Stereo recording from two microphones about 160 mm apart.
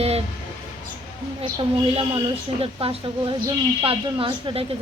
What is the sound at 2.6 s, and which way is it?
Speech, 35° right (ahead or behind).